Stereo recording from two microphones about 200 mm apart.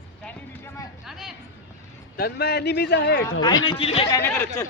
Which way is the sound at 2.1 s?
55° left (ahead or behind).